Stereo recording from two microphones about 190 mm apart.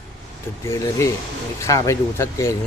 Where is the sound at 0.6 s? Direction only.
15° left (ahead or behind).